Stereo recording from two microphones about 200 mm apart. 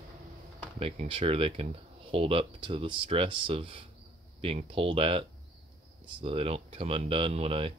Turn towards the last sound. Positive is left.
turn(degrees=-30)  # may be behind; listen again after turning